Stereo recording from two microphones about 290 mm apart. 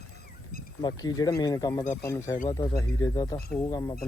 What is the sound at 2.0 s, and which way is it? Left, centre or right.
Speech, centre.